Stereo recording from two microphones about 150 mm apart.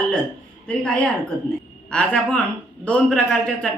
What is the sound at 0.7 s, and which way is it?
A man's voice, 5° left (ahead or behind).